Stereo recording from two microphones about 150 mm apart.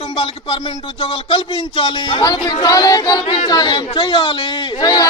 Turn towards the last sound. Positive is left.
turn(degrees=25)  # may be behind; listen again after turning